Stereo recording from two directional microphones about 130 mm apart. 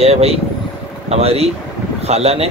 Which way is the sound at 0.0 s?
50° right (ahead or behind).